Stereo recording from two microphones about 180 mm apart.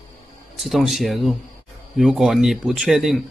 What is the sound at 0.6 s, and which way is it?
Speech, centre (ahead or behind).